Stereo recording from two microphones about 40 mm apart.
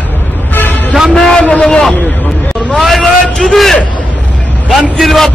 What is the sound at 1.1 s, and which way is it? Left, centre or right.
Speech, left.